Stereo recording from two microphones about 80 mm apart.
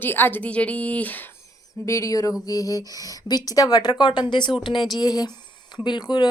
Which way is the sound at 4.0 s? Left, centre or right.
Left.